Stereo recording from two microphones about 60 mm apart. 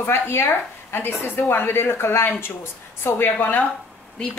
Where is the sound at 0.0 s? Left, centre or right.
Left.